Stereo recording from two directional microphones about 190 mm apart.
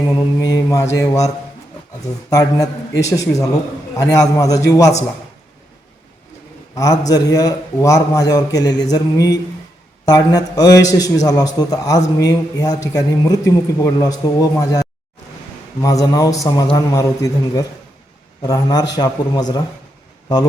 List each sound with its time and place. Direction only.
0.0 s mantra: 20° left (ahead or behind)
2.3 s a man's voice: 20° left (ahead or behind)
7.1 s a man's voice: 20° left (ahead or behind)